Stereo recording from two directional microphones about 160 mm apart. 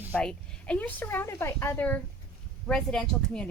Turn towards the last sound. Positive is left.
turn(degrees=5)  # may be behind; listen again after turning